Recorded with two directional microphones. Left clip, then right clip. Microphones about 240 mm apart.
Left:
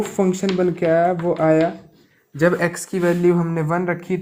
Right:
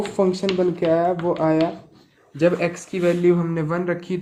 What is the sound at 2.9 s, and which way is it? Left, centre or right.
Speech, left.